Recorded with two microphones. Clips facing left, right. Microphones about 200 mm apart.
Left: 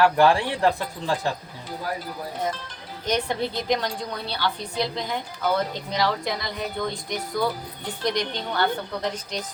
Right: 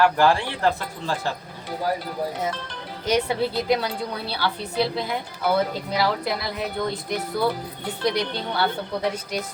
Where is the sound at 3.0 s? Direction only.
10° right (ahead or behind).